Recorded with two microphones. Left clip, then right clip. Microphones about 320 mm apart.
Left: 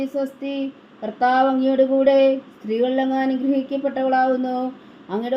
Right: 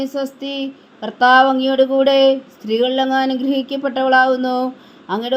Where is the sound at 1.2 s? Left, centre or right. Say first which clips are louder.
Right 6 dB; right.